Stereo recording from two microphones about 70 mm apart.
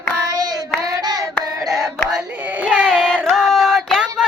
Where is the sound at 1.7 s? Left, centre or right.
Centre.